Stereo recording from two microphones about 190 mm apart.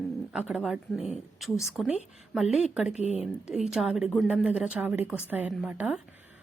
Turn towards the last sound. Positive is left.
turn(degrees=-5)  # may be behind; listen again after turning